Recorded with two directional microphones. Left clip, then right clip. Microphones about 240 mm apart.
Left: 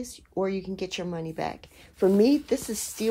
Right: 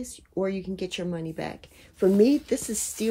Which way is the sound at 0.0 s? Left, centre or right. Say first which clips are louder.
Even; left.